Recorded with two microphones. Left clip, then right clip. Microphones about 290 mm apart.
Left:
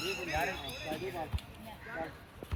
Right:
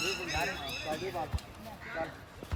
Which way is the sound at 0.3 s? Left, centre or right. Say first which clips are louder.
Even; centre.